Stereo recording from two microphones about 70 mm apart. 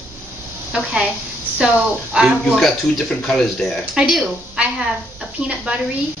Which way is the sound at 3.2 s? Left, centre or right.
Centre.